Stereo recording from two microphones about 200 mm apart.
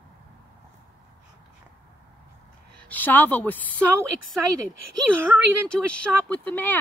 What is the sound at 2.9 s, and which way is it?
Speech, 10° left (ahead or behind).